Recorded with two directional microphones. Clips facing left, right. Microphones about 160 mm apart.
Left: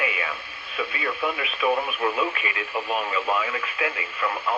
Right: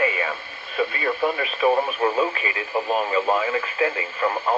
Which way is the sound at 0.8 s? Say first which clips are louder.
Right 5 dB; 40° right (ahead or behind).